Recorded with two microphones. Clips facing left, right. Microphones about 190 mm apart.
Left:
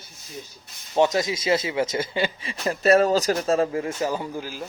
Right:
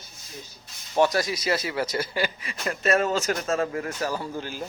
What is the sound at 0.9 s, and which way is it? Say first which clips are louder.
Speech: left 2 dB; 20° left (ahead or behind).